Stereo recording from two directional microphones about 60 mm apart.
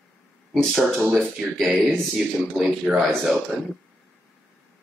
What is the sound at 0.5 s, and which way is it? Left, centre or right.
Speech, centre.